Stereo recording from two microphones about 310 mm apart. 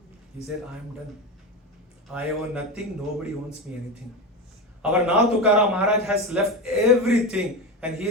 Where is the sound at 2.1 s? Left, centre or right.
Centre.